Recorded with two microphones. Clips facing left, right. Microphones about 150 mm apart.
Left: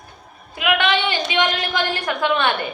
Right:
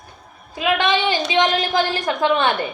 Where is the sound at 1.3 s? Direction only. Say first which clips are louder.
Right 3 dB; 25° right (ahead or behind).